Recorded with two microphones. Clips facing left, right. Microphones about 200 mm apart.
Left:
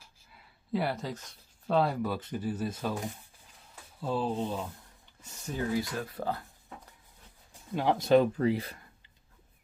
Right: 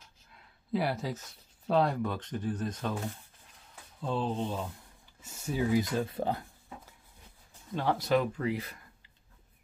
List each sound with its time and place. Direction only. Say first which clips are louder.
0.0 s speech: even; 5° left (ahead or behind)
5.2 s speech: right 3 dB; 10° right (ahead or behind)
7.7 s speech: left 4 dB; 15° left (ahead or behind); by 8.7 s 30° left (ahead or behind)